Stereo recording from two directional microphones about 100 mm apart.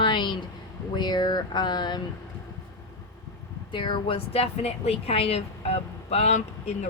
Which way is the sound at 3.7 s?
55° left (ahead or behind).